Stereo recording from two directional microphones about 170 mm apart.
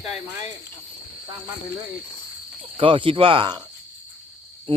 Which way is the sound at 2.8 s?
30° right (ahead or behind).